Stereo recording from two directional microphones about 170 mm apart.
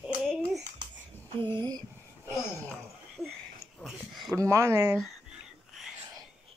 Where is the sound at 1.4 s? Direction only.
25° right (ahead or behind).